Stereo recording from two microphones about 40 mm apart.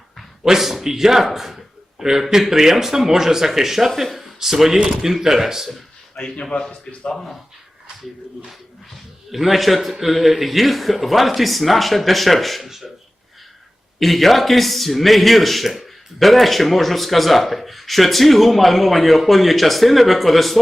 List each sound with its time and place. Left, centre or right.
0.4 s speech: centre
6.2 s speech: centre
6.6 s speech: left
9.3 s speech: centre
14.0 s speech: centre